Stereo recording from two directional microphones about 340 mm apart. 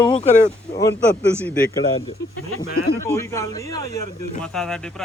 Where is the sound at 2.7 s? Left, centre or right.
Left.